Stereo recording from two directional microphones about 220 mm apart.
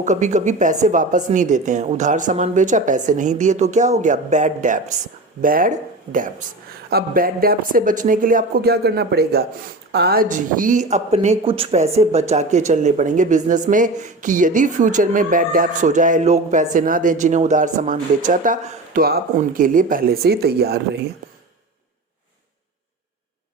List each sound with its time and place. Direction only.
0.0 s speech: 35° right (ahead or behind)